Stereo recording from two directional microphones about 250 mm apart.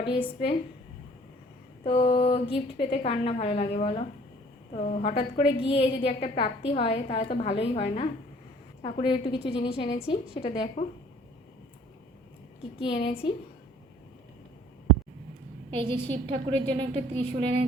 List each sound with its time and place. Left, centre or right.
0.0 s a woman's voice: centre
1.8 s a woman's voice: left
12.8 s a woman's voice: left
15.7 s a woman's voice: right